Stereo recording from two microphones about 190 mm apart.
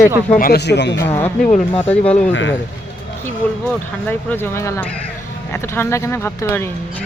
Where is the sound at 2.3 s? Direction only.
80° left.